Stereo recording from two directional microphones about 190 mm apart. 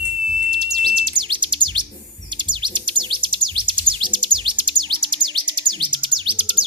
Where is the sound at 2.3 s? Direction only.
25° right (ahead or behind).